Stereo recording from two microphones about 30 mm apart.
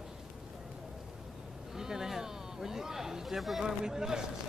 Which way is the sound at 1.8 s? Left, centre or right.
Centre.